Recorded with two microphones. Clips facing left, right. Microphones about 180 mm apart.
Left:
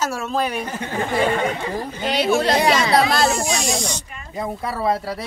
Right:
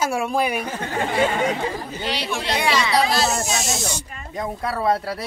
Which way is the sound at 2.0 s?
50° left (ahead or behind).